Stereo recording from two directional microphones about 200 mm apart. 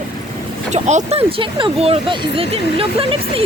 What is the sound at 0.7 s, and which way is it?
Speech, 35° right (ahead or behind).